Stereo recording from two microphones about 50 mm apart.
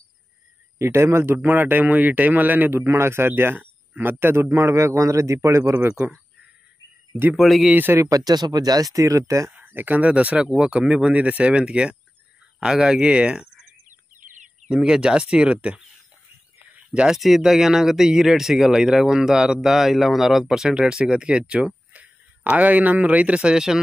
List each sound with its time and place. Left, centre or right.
0.7 s speech: right
1.4 s a man's voice: right
7.3 s speech: centre
7.7 s a man's voice: right
8.9 s speech: right
9.5 s speech: right
14.7 s speech: centre
17.1 s speech: centre
21.9 s speech: right; by 23.8 s centre